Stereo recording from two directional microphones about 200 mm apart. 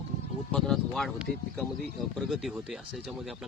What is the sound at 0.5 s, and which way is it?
Speech, centre (ahead or behind).